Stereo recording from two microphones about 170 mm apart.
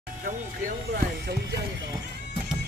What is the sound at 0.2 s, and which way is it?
Speech, 55° right (ahead or behind).